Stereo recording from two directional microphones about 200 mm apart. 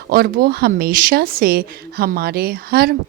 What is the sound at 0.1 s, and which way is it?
Speech, 50° right (ahead or behind).